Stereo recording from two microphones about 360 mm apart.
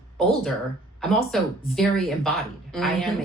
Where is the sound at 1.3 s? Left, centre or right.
Centre.